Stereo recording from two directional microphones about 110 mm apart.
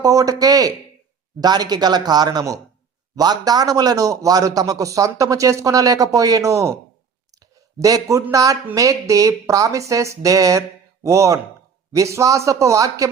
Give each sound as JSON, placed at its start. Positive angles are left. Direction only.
{"t": 0.0, "sound": "a man's voice", "side_deg": -30}
{"t": 7.8, "sound": "a man's voice", "side_deg": -30}